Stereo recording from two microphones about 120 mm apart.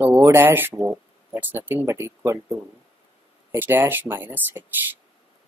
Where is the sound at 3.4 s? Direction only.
20° right (ahead or behind).